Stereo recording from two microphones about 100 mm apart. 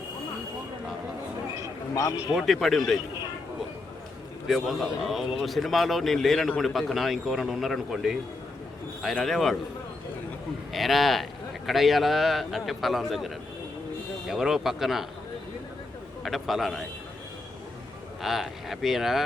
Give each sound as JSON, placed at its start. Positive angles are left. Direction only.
{"t": 2.0, "sound": "a man's voice", "side_deg": 35}
{"t": 2.3, "sound": "a man's voice", "side_deg": 0}
{"t": 4.4, "sound": "a man's voice", "side_deg": 0}
{"t": 10.7, "sound": "a man's voice", "side_deg": 0}
{"t": 16.2, "sound": "a man's voice", "side_deg": 0}
{"t": 18.2, "sound": "a man's voice", "side_deg": -5}